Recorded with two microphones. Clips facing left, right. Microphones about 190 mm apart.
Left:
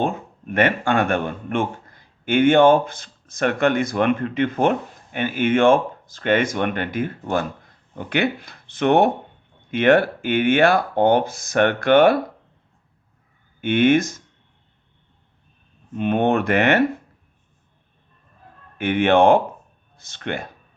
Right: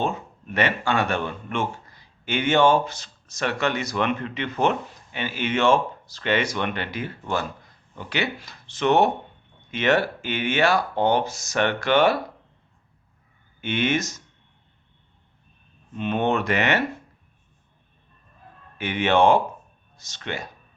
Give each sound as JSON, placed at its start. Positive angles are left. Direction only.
{"t": 0.0, "sound": "speech", "side_deg": 50}
{"t": 13.6, "sound": "speech", "side_deg": 55}
{"t": 16.0, "sound": "speech", "side_deg": 50}
{"t": 18.8, "sound": "speech", "side_deg": 55}